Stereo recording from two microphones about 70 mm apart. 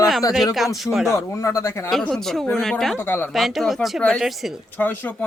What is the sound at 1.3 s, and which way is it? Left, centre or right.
Speech, left.